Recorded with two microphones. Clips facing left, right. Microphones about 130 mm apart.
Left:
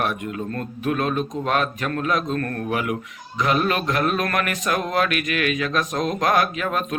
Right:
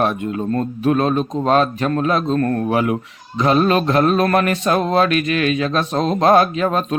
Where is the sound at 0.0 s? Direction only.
30° right (ahead or behind).